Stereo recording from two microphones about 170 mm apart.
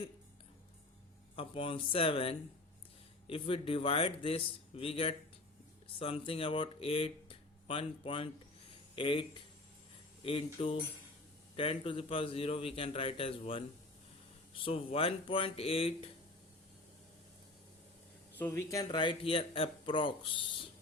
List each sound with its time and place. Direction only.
1.4 s speech: 30° left (ahead or behind)
18.3 s speech: 15° left (ahead or behind); by 20.7 s 30° left (ahead or behind)